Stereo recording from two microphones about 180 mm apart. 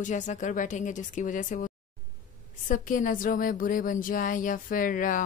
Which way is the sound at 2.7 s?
45° left (ahead or behind).